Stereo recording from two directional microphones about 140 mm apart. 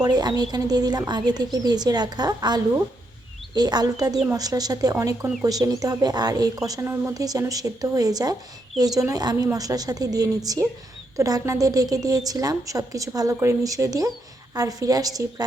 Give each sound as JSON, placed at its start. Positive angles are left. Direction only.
{"t": 0.0, "sound": "a woman's voice", "side_deg": -30}